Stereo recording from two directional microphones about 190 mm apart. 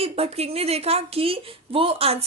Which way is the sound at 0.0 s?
30° right (ahead or behind).